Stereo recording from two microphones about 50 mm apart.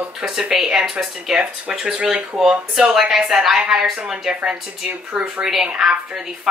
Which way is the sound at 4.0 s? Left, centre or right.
Right.